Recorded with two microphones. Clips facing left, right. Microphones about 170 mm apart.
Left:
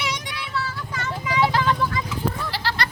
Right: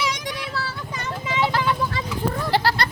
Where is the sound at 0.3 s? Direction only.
40° right (ahead or behind).